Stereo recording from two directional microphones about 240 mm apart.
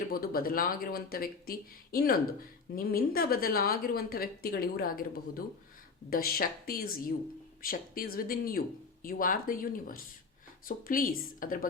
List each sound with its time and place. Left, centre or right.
0.1 s speech: left
6.1 s speech: left